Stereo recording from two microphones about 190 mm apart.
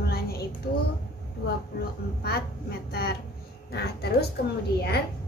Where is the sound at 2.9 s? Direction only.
55° left (ahead or behind).